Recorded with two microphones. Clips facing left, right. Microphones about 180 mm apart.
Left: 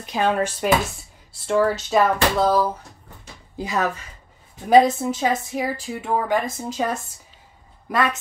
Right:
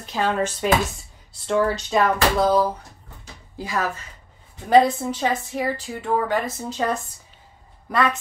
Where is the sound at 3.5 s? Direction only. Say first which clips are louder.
Left 2 dB; 20° left (ahead or behind).